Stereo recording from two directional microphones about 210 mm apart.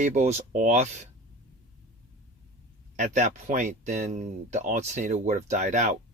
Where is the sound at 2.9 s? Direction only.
35° right (ahead or behind).